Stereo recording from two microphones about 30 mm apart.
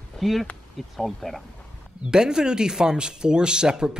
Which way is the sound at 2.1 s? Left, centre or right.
Right.